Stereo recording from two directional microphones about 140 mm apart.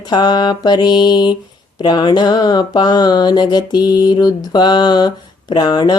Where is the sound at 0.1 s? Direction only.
30° left (ahead or behind).